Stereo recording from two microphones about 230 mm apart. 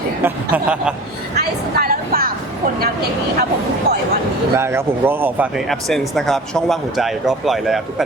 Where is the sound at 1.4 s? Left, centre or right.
Right.